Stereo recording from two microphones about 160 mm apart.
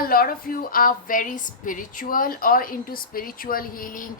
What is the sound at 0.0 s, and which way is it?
A woman's voice, 65° left (ahead or behind).